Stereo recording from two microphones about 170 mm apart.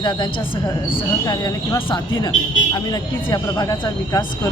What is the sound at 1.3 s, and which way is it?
Speech, 20° left (ahead or behind).